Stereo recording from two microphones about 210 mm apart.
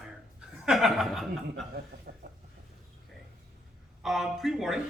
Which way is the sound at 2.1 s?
50° right (ahead or behind).